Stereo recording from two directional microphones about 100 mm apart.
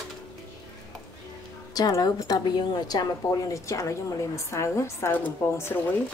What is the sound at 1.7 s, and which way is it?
A woman's voice, 40° left (ahead or behind).